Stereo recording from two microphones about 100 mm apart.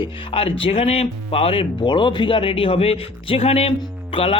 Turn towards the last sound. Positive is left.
turn(degrees=70)  # may be behind; listen again after turning